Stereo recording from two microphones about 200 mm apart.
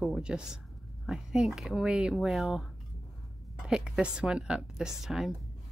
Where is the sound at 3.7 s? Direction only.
5° right (ahead or behind).